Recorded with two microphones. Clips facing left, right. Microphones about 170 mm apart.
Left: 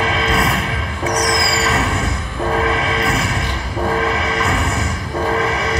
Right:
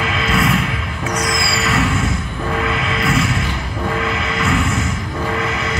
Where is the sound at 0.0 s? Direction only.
35° left (ahead or behind).